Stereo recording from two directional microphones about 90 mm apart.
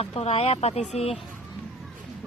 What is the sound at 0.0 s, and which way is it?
Speech, 90° left.